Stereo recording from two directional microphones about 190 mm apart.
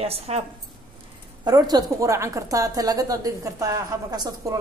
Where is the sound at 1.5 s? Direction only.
20° right (ahead or behind).